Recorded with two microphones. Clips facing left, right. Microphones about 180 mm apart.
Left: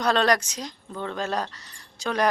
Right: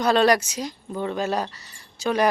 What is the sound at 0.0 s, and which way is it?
Speech, 5° right (ahead or behind).